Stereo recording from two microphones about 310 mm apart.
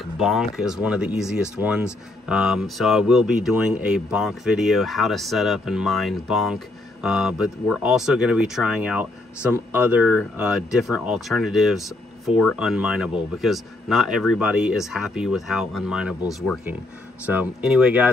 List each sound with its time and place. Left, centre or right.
0.2 s speech: centre
17.3 s speech: centre